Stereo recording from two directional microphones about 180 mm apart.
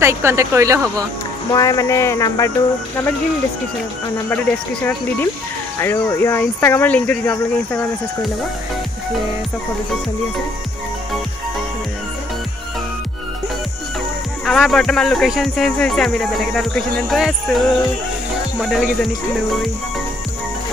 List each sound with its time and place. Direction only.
0.0 s speech: 15° right (ahead or behind)
1.5 s speech: 20° left (ahead or behind)
4.3 s speech: 10° left (ahead or behind)
14.4 s speech: centre (ahead or behind)